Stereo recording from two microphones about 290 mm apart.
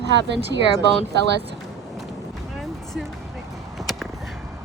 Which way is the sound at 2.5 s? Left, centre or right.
Centre.